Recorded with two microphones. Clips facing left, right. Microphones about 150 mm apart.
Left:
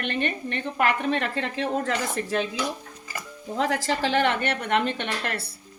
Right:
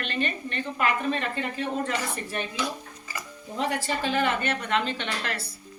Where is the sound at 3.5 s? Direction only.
90° left.